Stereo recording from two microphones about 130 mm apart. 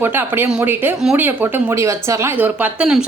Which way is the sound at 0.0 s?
15° right (ahead or behind).